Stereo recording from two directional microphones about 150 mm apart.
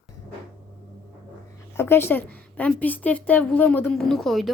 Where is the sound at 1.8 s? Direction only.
15° left (ahead or behind).